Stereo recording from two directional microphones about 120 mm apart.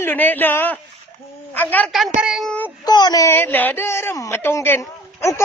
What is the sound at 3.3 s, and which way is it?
A woman's voice, 15° left (ahead or behind).